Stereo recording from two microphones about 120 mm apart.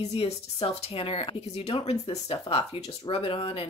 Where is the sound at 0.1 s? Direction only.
55° left (ahead or behind).